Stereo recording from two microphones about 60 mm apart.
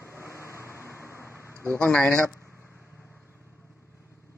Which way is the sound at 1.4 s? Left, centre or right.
Left.